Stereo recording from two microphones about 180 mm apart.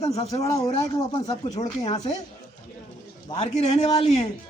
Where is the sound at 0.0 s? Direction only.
35° left (ahead or behind).